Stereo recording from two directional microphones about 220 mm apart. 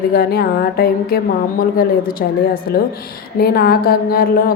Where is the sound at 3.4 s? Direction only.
45° left (ahead or behind).